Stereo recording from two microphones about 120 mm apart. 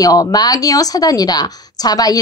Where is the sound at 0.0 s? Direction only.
30° left (ahead or behind).